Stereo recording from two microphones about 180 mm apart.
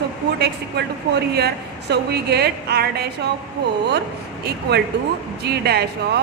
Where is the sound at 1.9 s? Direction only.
65° right (ahead or behind).